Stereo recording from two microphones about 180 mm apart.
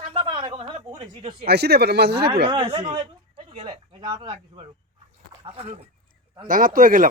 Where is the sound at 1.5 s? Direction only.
65° right (ahead or behind).